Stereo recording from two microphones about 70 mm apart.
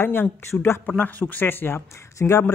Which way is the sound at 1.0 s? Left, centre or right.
Left.